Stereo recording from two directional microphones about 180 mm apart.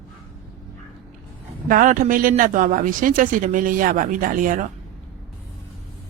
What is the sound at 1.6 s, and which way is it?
Speech, 50° right (ahead or behind).